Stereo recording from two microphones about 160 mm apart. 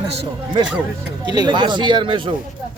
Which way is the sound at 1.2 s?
25° right (ahead or behind).